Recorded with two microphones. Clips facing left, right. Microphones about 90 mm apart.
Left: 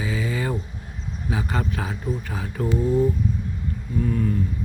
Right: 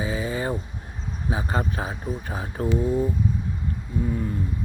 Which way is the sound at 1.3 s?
30° right (ahead or behind).